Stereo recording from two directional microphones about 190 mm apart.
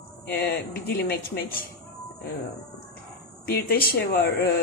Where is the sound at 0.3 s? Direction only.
55° left (ahead or behind).